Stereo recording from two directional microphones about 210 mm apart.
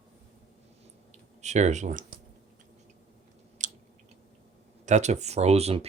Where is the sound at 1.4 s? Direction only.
35° right (ahead or behind).